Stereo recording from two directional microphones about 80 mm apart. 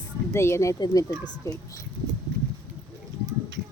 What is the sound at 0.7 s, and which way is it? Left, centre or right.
Speech, left.